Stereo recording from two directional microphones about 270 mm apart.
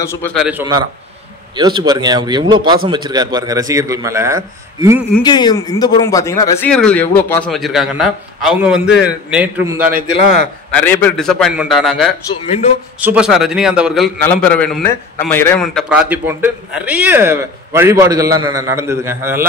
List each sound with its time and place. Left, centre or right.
0.0 s a man's voice: centre
5.2 s a man's voice: centre
10.7 s a man's voice: centre
12.3 s speech: left
13.0 s a man's voice: centre